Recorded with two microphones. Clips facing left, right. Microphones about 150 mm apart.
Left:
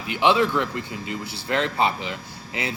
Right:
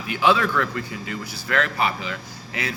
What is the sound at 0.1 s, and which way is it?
A man's voice, 20° left (ahead or behind).